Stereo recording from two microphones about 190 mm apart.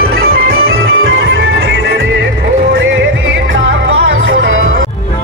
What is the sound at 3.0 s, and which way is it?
Music, 80° right.